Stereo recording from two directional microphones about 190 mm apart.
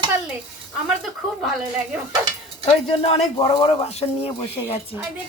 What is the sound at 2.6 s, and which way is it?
A man's voice, 35° left (ahead or behind).